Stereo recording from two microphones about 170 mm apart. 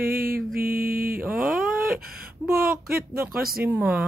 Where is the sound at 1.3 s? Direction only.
Centre (ahead or behind).